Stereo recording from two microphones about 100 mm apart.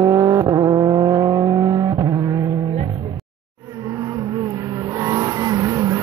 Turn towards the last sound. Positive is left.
turn(degrees=-35)  # may be behind; listen again after turning